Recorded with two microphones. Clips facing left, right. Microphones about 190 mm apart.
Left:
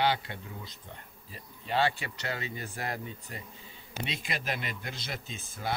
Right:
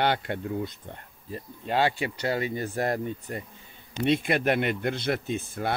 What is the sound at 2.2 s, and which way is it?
Speech, 35° right (ahead or behind).